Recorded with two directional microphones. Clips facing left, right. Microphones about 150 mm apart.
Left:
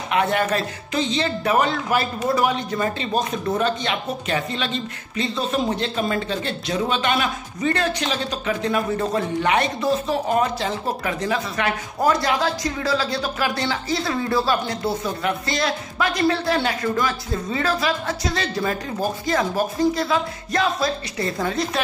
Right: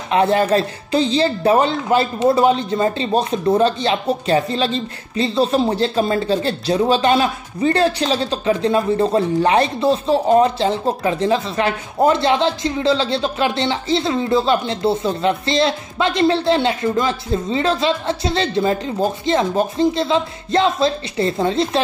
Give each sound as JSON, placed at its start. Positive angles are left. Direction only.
{"t": 0.1, "sound": "speech", "side_deg": -30}